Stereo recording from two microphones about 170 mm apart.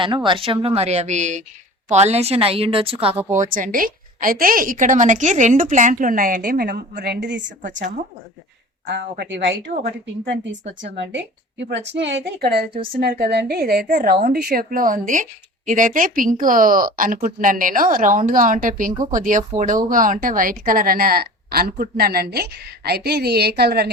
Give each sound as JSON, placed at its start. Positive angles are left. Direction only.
{"t": 0.0, "sound": "speech", "side_deg": -30}
{"t": 3.5, "sound": "speech", "side_deg": -55}
{"t": 7.8, "sound": "speech", "side_deg": -50}
{"t": 8.9, "sound": "a woman's voice", "side_deg": -85}